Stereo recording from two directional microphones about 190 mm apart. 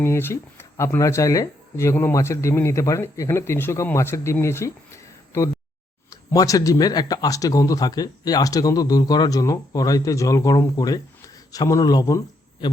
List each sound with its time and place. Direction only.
0.0 s speech: 15° left (ahead or behind)